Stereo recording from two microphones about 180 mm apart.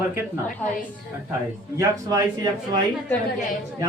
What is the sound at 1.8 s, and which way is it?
Speech, 20° right (ahead or behind).